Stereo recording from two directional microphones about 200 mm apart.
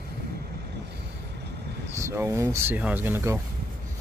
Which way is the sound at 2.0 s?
10° right (ahead or behind).